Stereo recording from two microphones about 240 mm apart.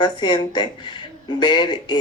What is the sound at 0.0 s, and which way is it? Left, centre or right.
Speech, centre.